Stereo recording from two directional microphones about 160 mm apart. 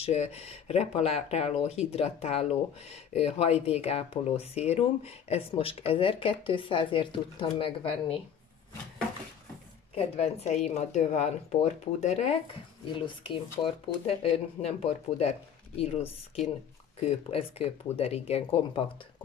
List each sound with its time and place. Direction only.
0.0 s speech: 40° left (ahead or behind)
9.9 s speech: 40° left (ahead or behind)
13.0 s speech: 30° left (ahead or behind)